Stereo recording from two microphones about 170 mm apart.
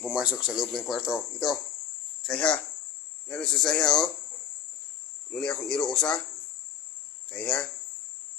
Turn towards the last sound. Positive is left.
turn(degrees=5)  # may be behind; listen again after turning